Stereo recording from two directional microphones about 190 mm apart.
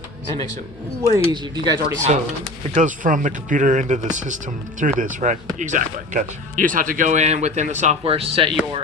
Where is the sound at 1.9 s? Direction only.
40° right (ahead or behind).